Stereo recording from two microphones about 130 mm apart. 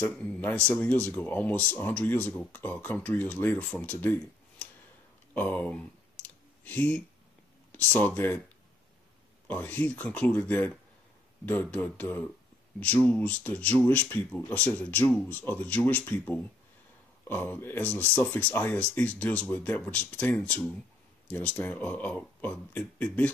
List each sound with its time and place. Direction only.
0.0 s speech: 10° left (ahead or behind)
6.2 s clicking: 10° left (ahead or behind)
7.7 s speech: 15° left (ahead or behind)
9.5 s speech: 10° left (ahead or behind)